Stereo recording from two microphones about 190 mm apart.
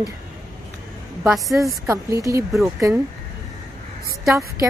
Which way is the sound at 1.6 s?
15° right (ahead or behind).